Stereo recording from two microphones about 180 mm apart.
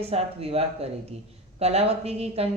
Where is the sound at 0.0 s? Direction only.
35° right (ahead or behind).